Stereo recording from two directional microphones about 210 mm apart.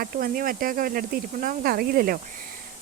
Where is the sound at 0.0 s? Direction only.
45° right (ahead or behind).